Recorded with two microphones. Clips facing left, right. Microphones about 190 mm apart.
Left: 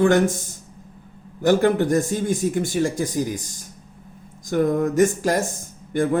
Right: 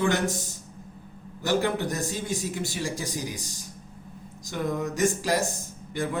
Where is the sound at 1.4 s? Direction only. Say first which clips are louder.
Left 8 dB; 50° left (ahead or behind).